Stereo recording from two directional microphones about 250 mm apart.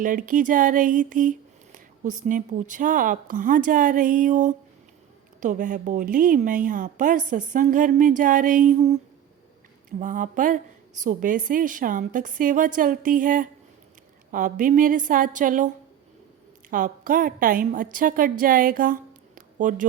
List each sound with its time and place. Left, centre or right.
0.0 s a woman's voice: right
10.0 s a woman's voice: right